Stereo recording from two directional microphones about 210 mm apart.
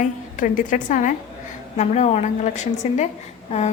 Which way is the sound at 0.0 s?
40° left (ahead or behind).